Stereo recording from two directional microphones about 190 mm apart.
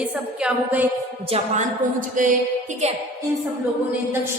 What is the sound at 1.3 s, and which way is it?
A woman's voice, 40° right (ahead or behind).